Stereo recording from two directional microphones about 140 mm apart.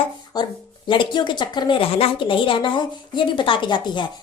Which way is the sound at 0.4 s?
30° left (ahead or behind).